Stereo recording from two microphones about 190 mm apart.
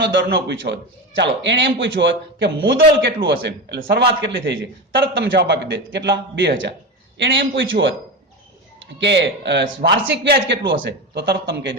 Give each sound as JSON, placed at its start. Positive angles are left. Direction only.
{"t": 0.0, "sound": "a man's voice", "side_deg": -65}